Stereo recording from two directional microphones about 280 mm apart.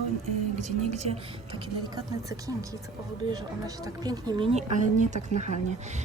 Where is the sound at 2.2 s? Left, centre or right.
Centre.